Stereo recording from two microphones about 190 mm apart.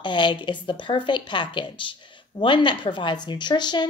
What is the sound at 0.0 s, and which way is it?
A woman's voice, 25° left (ahead or behind).